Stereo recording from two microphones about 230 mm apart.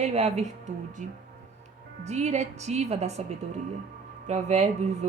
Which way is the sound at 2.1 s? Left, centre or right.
Right.